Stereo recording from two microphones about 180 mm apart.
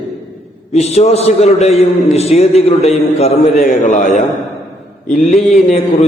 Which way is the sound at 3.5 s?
50° left (ahead or behind).